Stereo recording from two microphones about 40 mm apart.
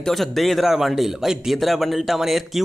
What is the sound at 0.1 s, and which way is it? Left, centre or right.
Speech, centre.